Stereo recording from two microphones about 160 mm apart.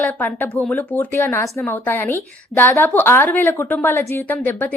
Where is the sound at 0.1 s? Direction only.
10° left (ahead or behind).